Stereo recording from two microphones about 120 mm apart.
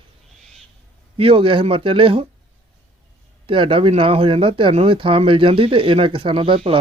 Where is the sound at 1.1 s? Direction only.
50° right (ahead or behind).